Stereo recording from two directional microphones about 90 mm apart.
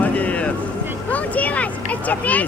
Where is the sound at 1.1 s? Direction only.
15° left (ahead or behind).